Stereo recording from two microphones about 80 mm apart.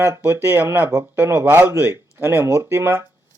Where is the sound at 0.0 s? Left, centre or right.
Right.